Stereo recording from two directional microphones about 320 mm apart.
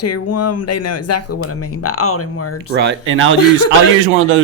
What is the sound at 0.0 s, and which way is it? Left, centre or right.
Speech, left.